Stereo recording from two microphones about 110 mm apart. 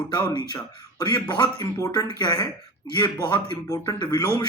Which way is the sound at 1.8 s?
30° left (ahead or behind).